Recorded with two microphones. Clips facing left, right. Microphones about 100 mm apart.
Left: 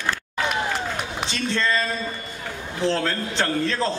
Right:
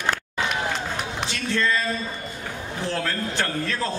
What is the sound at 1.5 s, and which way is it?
Speech, 25° left (ahead or behind).